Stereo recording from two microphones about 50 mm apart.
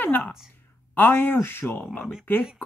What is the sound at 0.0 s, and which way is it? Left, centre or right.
Speech, left.